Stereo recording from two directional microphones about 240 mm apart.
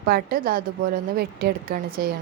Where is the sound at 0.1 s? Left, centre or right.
Right.